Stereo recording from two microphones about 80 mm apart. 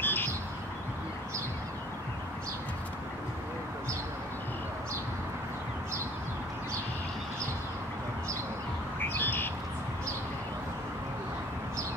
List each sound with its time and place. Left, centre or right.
0.0 s bird: left
9.1 s bird: left